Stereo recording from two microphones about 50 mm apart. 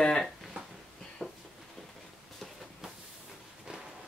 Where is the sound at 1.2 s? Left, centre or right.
Left.